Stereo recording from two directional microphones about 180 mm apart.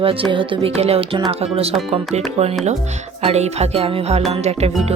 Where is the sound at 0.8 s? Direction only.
35° right (ahead or behind).